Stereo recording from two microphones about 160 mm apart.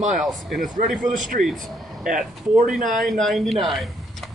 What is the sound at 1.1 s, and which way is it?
Speech, 55° right (ahead or behind).